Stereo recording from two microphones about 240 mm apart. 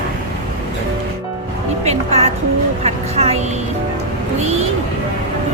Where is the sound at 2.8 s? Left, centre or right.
Right.